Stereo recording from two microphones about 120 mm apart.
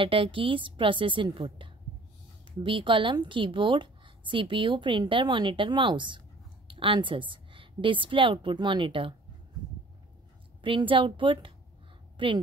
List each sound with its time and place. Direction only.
0.0 s a woman's voice: 45° right (ahead or behind)
10.6 s a woman's voice: 45° right (ahead or behind)